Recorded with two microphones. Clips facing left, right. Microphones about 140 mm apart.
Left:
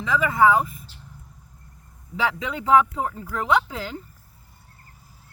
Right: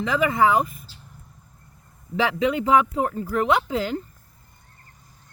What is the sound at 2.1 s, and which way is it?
Speech, 70° right (ahead or behind).